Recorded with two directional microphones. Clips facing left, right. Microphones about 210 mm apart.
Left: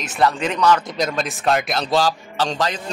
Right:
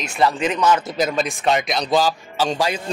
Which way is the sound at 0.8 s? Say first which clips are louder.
Right 2 dB; 5° right (ahead or behind).